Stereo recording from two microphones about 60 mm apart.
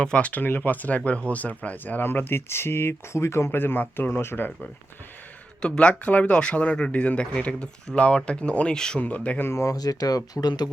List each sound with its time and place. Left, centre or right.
0.0 s speech: centre; by 4.5 s left
5.6 s speech: centre
9.0 s speech: left
9.4 s speech: left